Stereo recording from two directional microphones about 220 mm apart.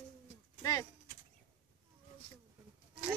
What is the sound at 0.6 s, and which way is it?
Bird, 15° left (ahead or behind).